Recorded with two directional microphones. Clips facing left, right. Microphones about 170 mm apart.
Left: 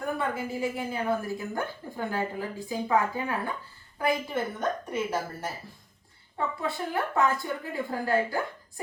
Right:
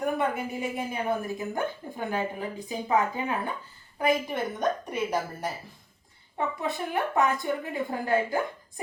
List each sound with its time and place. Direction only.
0.0 s speech: 20° right (ahead or behind)